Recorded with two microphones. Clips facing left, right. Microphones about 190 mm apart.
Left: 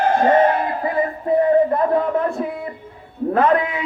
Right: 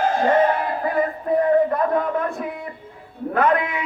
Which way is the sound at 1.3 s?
25° left (ahead or behind).